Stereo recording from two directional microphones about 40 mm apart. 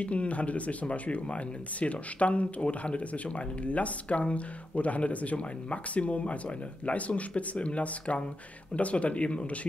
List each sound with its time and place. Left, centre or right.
0.0 s speech: left